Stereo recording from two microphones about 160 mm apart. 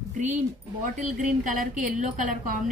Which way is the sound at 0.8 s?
60° right (ahead or behind).